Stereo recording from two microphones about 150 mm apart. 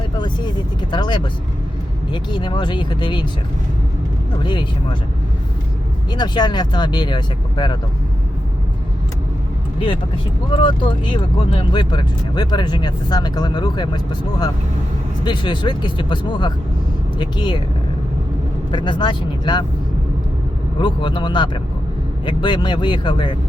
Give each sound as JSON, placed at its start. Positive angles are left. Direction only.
{"t": 0.8, "sound": "speech", "side_deg": 30}
{"t": 4.4, "sound": "speech", "side_deg": 30}
{"t": 6.1, "sound": "speech", "side_deg": 30}
{"t": 10.6, "sound": "speech", "side_deg": 35}
{"t": 18.7, "sound": "speech", "side_deg": 30}
{"t": 20.7, "sound": "speech", "side_deg": 35}